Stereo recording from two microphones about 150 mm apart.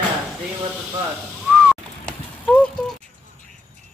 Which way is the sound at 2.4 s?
10° left (ahead or behind).